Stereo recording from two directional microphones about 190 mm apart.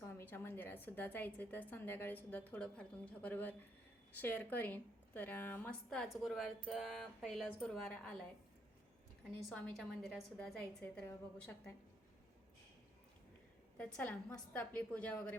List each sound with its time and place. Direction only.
0.0 s a woman's voice: 10° left (ahead or behind)
9.5 s a woman's voice: 5° left (ahead or behind)
13.7 s a woman's voice: 5° left (ahead or behind)